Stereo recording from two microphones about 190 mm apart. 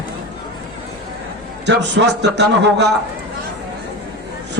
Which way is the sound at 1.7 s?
65° right (ahead or behind).